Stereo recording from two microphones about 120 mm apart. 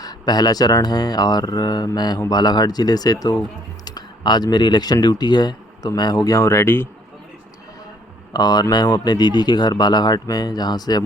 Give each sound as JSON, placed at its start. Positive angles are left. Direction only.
{"t": 0.0, "sound": "a man's voice", "side_deg": 35}
{"t": 8.3, "sound": "a man's voice", "side_deg": 35}